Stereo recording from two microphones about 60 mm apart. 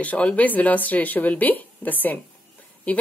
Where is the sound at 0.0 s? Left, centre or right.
Left.